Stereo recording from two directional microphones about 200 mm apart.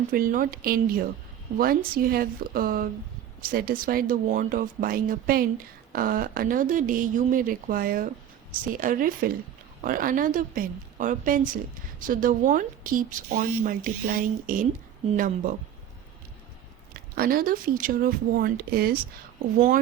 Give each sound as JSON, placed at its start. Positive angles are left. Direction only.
{"t": 0.1, "sound": "a woman's voice", "side_deg": -45}
{"t": 16.9, "sound": "a woman's voice", "side_deg": -45}